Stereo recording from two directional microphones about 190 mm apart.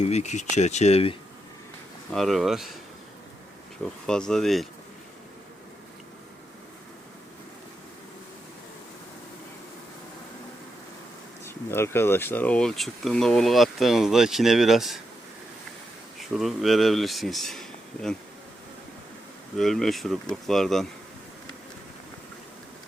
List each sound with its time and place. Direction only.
0.0 s speech: 35° left (ahead or behind)
2.1 s speech: centre (ahead or behind)
3.8 s speech: 5° left (ahead or behind)
11.4 s speech: 15° left (ahead or behind)
16.3 s speech: centre (ahead or behind)
19.5 s speech: centre (ahead or behind)